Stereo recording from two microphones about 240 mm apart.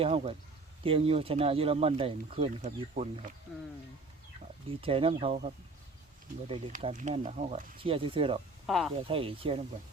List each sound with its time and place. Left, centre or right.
0.0 s speech: right
4.8 s speech: right
6.5 s speech: right
8.6 s speech: centre
9.0 s speech: right